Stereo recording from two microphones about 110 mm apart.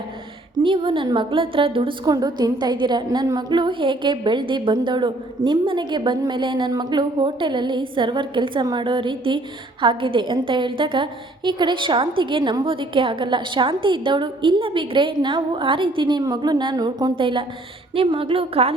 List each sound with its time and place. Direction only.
0.6 s a woman's voice: 50° right (ahead or behind)
2.0 s a woman's voice: 35° right (ahead or behind)
17.2 s a woman's voice: 50° right (ahead or behind)